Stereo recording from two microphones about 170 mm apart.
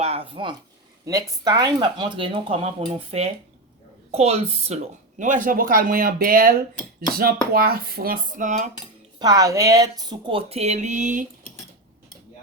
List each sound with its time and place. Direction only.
0.0 s speech: 35° right (ahead or behind); by 6.6 s 60° right (ahead or behind)
7.2 s cutlery: 60° right (ahead or behind); by 8.7 s 45° right (ahead or behind)
9.1 s speech: 20° right (ahead or behind); by 11.3 s 45° right (ahead or behind)